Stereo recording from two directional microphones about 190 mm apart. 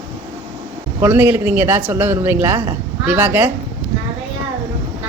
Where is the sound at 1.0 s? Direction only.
10° right (ahead or behind).